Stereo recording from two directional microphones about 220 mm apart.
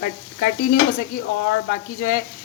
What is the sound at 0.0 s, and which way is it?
A woman's voice, 40° left (ahead or behind).